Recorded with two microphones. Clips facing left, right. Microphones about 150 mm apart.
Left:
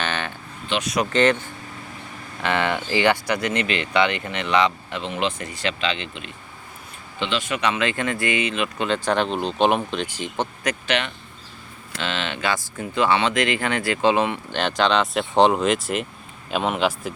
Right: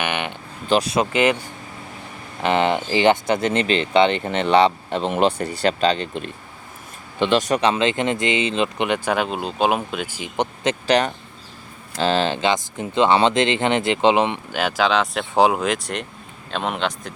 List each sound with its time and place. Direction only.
0.0 s a sound: 15° right (ahead or behind)
0.7 s speech: 30° right (ahead or behind)
1.1 s speech: 10° right (ahead or behind); by 8.9 s 25° right (ahead or behind)
8.9 s speech: 10° right (ahead or behind)
10.8 s speech: 40° right (ahead or behind)
12.4 s speech: 20° right (ahead or behind)
14.5 s speech: 5° right (ahead or behind)